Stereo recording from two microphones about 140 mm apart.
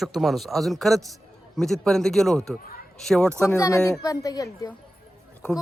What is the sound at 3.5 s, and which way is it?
Speech, 20° left (ahead or behind).